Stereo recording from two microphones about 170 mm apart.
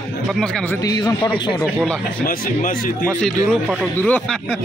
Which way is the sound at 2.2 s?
55° left (ahead or behind).